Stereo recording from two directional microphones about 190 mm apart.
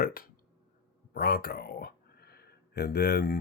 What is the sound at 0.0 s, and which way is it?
Speech, 50° left (ahead or behind).